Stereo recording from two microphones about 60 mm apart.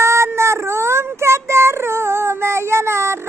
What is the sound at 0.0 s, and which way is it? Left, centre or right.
Child singing, right.